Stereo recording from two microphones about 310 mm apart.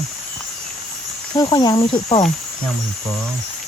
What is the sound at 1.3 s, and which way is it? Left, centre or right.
Speech, centre.